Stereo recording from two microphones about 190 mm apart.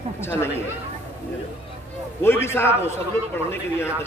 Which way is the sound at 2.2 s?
15° left (ahead or behind).